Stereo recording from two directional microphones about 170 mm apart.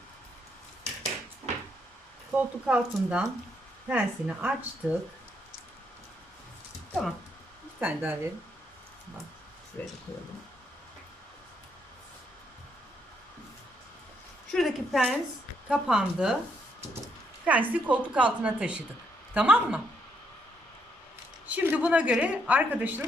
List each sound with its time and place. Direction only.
1.5 s cupboard open or close: 40° right (ahead or behind)
2.3 s speech: 5° right (ahead or behind)
7.8 s speech: 10° right (ahead or behind)
9.8 s speech: 10° left (ahead or behind)
14.5 s a woman's voice: centre (ahead or behind)
17.4 s speech: 10° right (ahead or behind)
21.4 s speech: 10° right (ahead or behind)